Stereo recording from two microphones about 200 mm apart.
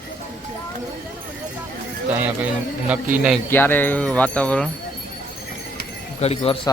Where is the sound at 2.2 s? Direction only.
5° right (ahead or behind).